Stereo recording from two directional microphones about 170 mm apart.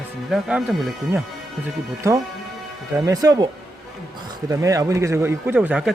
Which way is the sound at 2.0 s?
15° right (ahead or behind).